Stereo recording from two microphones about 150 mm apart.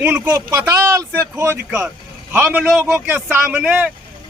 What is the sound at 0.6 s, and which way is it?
A man's voice, 20° right (ahead or behind).